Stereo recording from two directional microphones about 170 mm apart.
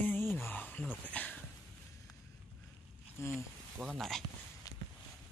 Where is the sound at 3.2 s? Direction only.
15° left (ahead or behind).